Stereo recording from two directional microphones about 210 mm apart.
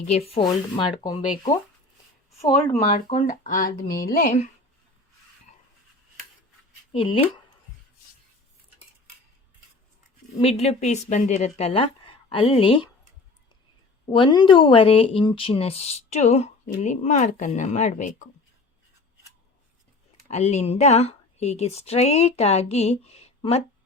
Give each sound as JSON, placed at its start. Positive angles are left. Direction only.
{"t": 0.1, "sound": "a woman's voice", "side_deg": 30}
{"t": 2.4, "sound": "speech", "side_deg": 15}
{"t": 2.9, "sound": "speech", "side_deg": 35}
{"t": 6.9, "sound": "a woman's voice", "side_deg": 25}
{"t": 10.3, "sound": "a woman's voice", "side_deg": 30}
{"t": 14.1, "sound": "a woman's voice", "side_deg": 20}
{"t": 20.2, "sound": "a woman's voice", "side_deg": 30}